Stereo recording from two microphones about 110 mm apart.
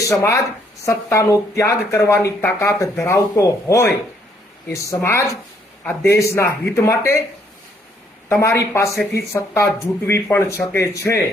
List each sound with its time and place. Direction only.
0.0 s a woman's voice: 25° left (ahead or behind)
5.0 s a woman's voice: 25° left (ahead or behind)
8.3 s a woman's voice: 25° left (ahead or behind)